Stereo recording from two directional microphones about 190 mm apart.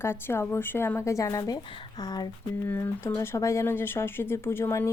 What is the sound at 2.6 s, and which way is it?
Speech, 10° left (ahead or behind).